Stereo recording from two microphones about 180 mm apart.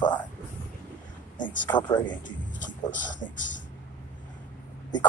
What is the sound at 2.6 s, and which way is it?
Music, 45° left (ahead or behind).